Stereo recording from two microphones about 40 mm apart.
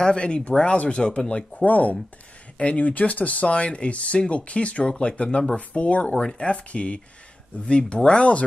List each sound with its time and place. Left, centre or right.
0.0 s speech: left